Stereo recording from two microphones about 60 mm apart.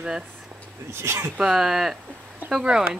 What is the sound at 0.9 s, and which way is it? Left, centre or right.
Speech, right.